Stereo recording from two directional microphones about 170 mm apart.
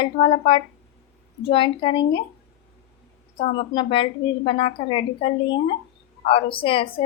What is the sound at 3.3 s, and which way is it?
A woman's voice, 30° left (ahead or behind).